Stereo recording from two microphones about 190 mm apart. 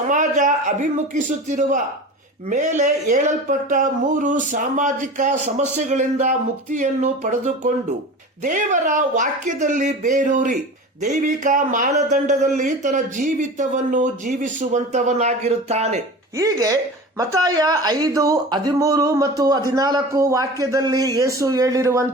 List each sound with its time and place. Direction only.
0.1 s a man's voice: 40° right (ahead or behind)
16.4 s speech: 15° right (ahead or behind)